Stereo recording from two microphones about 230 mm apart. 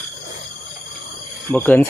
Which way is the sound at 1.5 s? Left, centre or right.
Centre.